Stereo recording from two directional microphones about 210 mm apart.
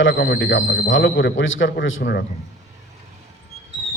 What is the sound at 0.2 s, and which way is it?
A man's voice, 50° left (ahead or behind).